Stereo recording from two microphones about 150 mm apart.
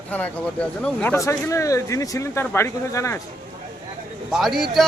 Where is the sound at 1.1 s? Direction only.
20° left (ahead or behind).